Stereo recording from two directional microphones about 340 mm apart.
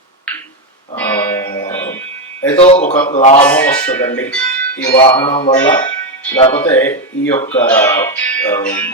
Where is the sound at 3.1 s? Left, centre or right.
Centre.